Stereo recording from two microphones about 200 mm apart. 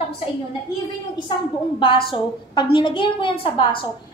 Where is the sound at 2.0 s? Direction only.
25° left (ahead or behind).